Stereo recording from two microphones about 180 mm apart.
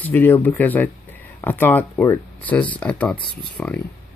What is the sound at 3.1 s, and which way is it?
Speech, 25° left (ahead or behind).